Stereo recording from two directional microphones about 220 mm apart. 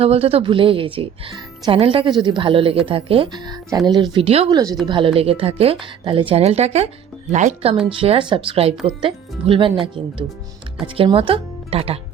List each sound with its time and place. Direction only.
0.0 s speech: 25° right (ahead or behind)